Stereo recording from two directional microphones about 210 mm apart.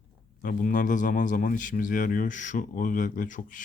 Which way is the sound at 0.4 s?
40° left (ahead or behind).